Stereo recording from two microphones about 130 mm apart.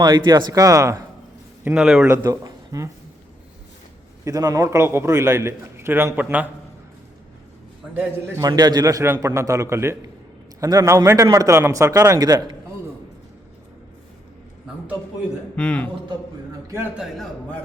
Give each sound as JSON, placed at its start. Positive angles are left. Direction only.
{"t": 0.0, "sound": "a man's voice", "side_deg": -35}
{"t": 1.6, "sound": "a man's voice", "side_deg": -5}
{"t": 2.1, "sound": "speech", "side_deg": -30}
{"t": 4.2, "sound": "a man's voice", "side_deg": -25}
{"t": 7.9, "sound": "a man's voice", "side_deg": -25}
{"t": 15.5, "sound": "a man's voice", "side_deg": 10}